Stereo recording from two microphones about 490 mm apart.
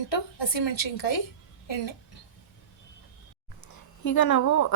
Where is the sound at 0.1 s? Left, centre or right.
Left.